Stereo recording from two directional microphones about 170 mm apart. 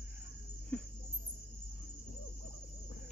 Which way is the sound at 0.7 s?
5° left (ahead or behind).